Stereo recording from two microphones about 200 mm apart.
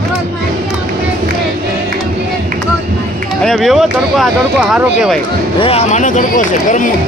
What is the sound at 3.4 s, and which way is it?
Speech, centre (ahead or behind).